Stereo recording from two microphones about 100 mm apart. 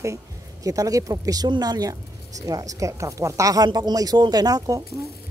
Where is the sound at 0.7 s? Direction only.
35° right (ahead or behind).